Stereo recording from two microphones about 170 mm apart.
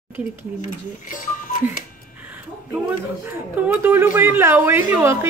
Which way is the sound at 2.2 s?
10° right (ahead or behind).